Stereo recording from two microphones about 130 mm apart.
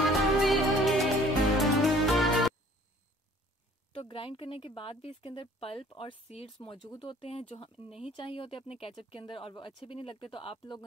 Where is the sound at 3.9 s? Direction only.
45° left (ahead or behind).